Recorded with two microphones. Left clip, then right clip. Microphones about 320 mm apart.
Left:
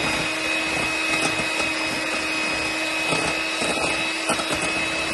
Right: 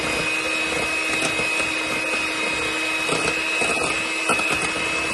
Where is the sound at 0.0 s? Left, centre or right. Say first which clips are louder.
Right 1 dB; centre.